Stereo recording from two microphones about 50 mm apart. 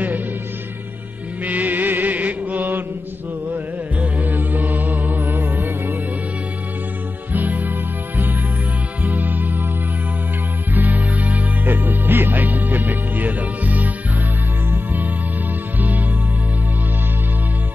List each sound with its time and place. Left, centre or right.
1.4 s music: right
4.0 s music: right
7.3 s music: right
9.0 s music: right
10.7 s music: right